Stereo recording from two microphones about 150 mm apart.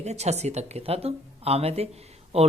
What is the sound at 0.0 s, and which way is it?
Speech, 45° right (ahead or behind).